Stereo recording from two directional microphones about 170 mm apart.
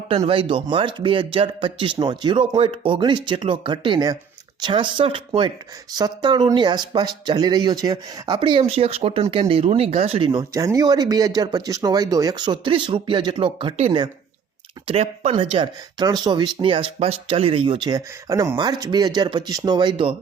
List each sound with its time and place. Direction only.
0.3 s speech: 30° right (ahead or behind)
10.5 s speech: 20° right (ahead or behind)
14.8 s speech: 40° right (ahead or behind)